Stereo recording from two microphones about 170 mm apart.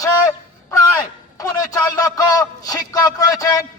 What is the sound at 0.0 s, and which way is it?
A man's voice, 20° left (ahead or behind).